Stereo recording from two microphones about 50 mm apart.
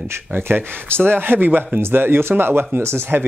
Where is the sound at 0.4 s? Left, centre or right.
Right.